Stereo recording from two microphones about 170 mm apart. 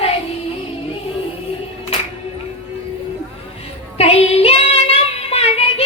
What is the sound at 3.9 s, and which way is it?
Child singing, 35° left (ahead or behind).